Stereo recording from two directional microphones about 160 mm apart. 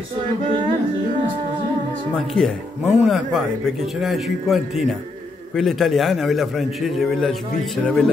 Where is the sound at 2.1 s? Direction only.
Centre (ahead or behind).